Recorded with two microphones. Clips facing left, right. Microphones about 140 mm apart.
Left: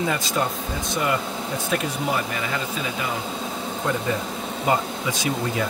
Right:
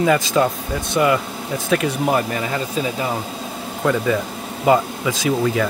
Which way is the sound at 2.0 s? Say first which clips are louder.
Right 6 dB; 45° right (ahead or behind).